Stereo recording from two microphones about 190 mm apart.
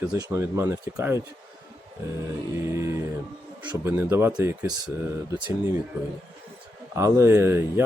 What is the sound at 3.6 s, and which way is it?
Speech, 10° right (ahead or behind).